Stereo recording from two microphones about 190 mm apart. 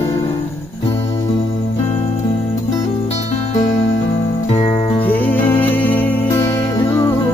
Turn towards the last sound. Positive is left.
turn(degrees=10)  # may be behind; listen again after turning